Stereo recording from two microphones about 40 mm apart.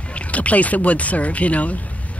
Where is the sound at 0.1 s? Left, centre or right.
Left.